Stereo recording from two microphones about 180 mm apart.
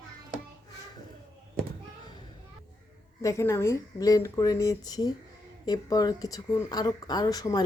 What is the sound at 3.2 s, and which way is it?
A woman's voice, 15° left (ahead or behind).